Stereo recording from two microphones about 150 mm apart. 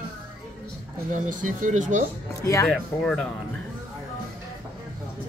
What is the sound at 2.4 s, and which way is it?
Speech, 20° left (ahead or behind).